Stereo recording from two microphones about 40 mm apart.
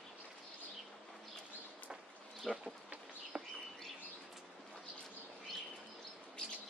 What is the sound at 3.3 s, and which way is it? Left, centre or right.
Bird, right.